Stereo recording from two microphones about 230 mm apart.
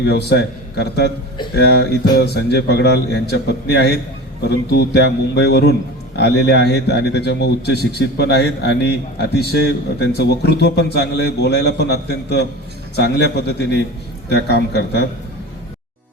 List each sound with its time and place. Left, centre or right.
0.0 s a man's voice: left